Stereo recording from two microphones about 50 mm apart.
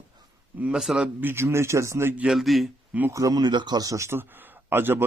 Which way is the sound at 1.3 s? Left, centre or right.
Right.